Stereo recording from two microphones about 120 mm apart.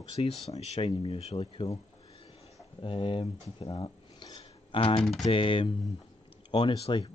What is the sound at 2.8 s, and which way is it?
Speech, 45° left (ahead or behind).